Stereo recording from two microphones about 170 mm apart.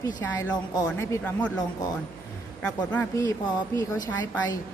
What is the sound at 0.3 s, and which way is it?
A man's voice, 15° left (ahead or behind).